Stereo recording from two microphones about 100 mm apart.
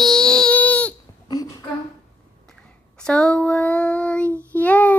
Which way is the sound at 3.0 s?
10° left (ahead or behind).